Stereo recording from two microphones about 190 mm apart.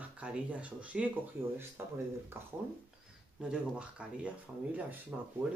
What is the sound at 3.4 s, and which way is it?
Speech, 5° right (ahead or behind).